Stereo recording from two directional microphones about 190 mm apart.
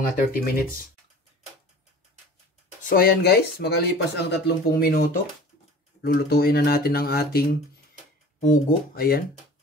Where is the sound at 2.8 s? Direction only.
50° left (ahead or behind).